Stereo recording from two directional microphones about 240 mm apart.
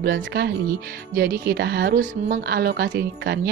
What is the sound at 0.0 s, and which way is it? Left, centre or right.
Speech, right.